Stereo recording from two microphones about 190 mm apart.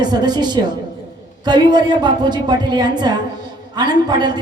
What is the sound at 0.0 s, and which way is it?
A woman's voice, 20° right (ahead or behind).